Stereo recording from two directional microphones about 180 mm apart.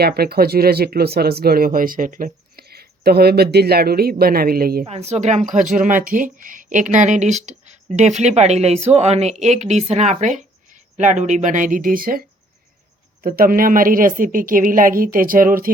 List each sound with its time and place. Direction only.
0.0 s speech: 60° right (ahead or behind)
4.9 s a woman's voice: 35° right (ahead or behind); by 12.2 s 50° right (ahead or behind)
13.2 s a woman's voice: 55° right (ahead or behind)